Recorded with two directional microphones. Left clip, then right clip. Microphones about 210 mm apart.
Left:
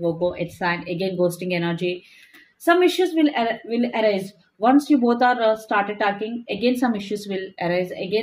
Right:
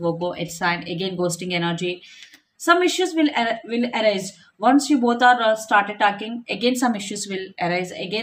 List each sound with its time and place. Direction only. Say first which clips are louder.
0.3 s speech: right 1 dB; 20° right (ahead or behind)